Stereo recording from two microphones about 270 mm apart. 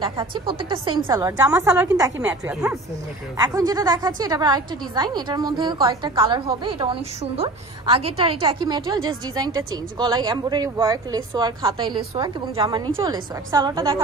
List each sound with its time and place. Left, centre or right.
0.0 s a woman's voice: centre